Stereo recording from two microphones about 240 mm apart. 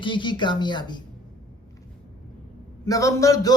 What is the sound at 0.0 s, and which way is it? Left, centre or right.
A man's voice, centre.